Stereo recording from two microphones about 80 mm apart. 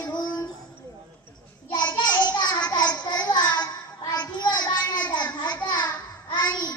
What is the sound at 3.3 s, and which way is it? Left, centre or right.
Child singing, left.